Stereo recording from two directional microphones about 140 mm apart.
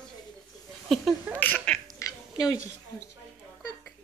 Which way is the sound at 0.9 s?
Centre (ahead or behind).